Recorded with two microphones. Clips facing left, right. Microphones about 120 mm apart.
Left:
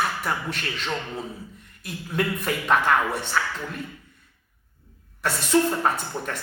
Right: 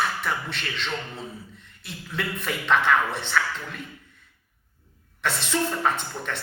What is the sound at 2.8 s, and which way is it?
Speech, 40° left (ahead or behind).